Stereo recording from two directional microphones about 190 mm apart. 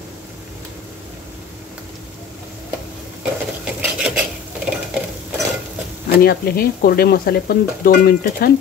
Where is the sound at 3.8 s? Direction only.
5° right (ahead or behind).